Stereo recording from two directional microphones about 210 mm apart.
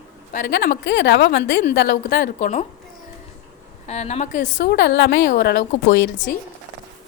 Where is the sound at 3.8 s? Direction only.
30° left (ahead or behind).